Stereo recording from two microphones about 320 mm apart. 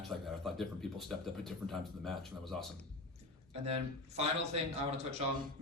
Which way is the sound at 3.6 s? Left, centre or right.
Centre.